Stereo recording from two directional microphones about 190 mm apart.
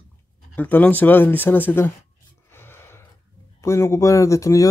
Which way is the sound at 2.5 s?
10° left (ahead or behind).